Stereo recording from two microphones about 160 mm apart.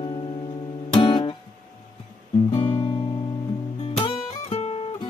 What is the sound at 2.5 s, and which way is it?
Music, 35° left (ahead or behind).